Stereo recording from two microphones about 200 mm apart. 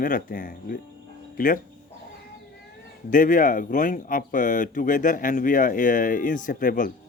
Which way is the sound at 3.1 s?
40° left (ahead or behind).